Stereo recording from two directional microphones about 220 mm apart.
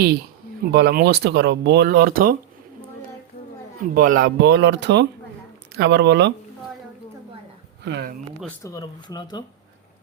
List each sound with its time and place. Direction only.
0.7 s speech: 50° right (ahead or behind)
3.9 s speech: 40° right (ahead or behind)
7.9 s speech: 50° right (ahead or behind)
8.6 s speech: 15° left (ahead or behind)